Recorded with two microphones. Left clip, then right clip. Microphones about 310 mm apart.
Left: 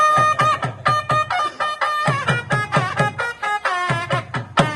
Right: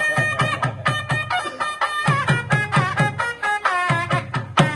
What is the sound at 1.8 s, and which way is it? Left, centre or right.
Music, left.